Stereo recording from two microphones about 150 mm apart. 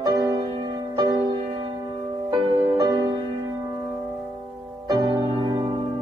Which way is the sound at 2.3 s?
25° right (ahead or behind).